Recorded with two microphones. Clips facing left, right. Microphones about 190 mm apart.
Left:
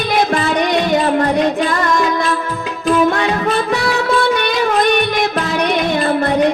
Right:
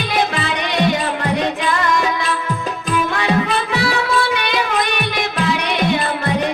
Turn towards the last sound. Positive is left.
turn(degrees=45)  # may be behind; listen again after turning